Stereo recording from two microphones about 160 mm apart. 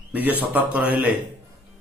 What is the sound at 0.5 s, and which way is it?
Speech, 10° right (ahead or behind).